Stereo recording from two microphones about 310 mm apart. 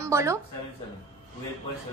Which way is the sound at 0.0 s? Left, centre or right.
Centre.